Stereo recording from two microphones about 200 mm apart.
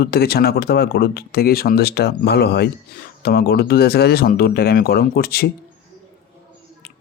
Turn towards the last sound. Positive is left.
turn(degrees=50)  # may be behind; listen again after turning